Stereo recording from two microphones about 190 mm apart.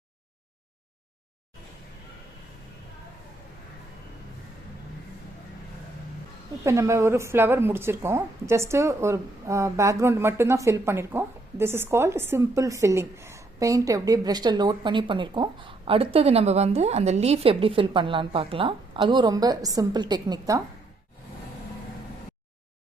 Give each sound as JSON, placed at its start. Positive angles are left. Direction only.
{"t": 6.7, "sound": "a woman's voice", "side_deg": -15}